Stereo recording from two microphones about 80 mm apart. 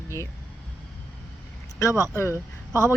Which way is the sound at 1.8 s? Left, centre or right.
Left.